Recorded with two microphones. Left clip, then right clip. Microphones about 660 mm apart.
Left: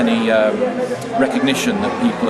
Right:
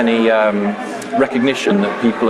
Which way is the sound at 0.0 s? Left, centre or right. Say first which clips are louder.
Right 2 dB; right.